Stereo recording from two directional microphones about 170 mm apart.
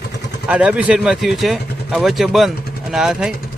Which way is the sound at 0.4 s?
5° right (ahead or behind).